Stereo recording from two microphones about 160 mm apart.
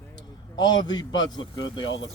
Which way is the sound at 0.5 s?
25° left (ahead or behind).